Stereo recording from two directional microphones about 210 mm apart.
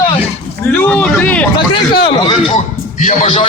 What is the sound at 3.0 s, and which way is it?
Speech, 35° left (ahead or behind).